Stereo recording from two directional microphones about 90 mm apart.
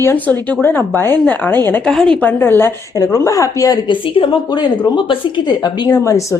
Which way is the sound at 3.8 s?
65° left (ahead or behind).